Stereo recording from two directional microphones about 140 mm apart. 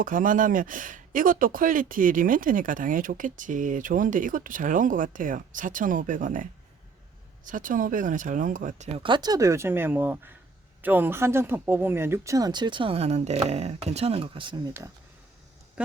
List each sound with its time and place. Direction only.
0.0 s speech: 75° right (ahead or behind)
9.0 s speech: 30° right (ahead or behind)
14.7 s speech: 20° right (ahead or behind)